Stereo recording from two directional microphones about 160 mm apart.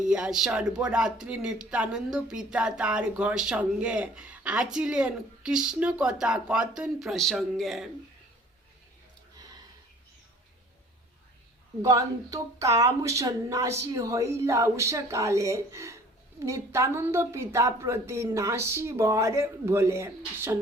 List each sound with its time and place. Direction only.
0.0 s speech: 5° right (ahead or behind)
11.8 s a woman's voice: 20° right (ahead or behind)